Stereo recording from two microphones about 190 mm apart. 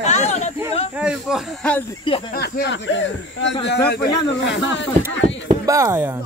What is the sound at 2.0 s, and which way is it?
Speech, 25° left (ahead or behind).